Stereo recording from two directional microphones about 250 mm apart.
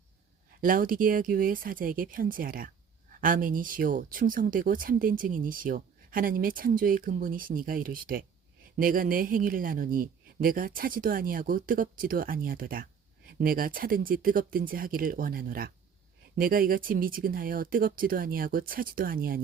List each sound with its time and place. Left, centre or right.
0.6 s speech: right